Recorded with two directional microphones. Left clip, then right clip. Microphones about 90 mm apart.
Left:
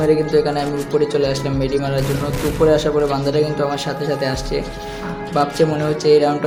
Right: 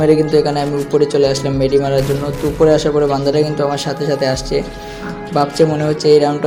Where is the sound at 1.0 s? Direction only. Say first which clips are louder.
Right 6 dB; 45° right (ahead or behind).